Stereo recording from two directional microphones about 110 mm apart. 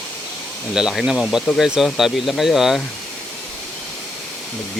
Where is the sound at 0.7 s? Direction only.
5° right (ahead or behind).